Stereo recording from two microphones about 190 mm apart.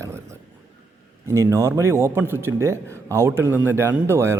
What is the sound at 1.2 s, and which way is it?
A man's voice, 15° right (ahead or behind).